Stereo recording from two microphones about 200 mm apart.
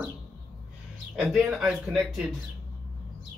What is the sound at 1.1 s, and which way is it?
Speech, 5° right (ahead or behind).